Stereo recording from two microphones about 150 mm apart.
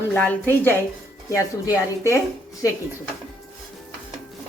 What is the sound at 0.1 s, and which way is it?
Speech, 15° left (ahead or behind).